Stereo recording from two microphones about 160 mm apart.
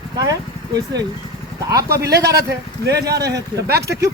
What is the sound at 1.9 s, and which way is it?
Speech, 90° right.